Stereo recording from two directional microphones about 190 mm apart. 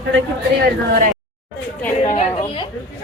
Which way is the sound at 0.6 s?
45° right (ahead or behind).